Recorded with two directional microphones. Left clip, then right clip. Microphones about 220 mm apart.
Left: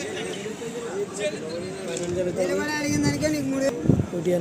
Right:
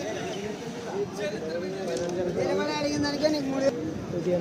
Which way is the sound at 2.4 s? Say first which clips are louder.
Even; 55° left (ahead or behind).